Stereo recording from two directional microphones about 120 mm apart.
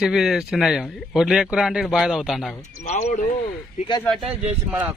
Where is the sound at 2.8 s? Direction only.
80° left.